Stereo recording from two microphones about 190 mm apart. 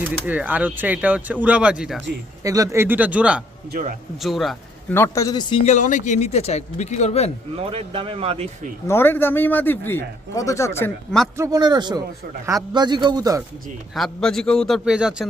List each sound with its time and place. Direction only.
0.3 s speech: 10° right (ahead or behind)
2.4 s speech: 15° right (ahead or behind)
3.7 s speech: 45° right (ahead or behind)
4.2 s a man's voice: centre (ahead or behind)
4.9 s speech: 15° left (ahead or behind)
5.6 s speech: 40° left (ahead or behind)
7.5 s speech: 30° right (ahead or behind)
8.9 s speech: 10° left (ahead or behind)
11.3 s a man's voice: 20° right (ahead or behind)
13.9 s a man's voice: centre (ahead or behind)